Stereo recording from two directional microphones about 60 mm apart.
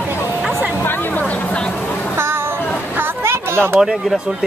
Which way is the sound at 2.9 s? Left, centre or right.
Right.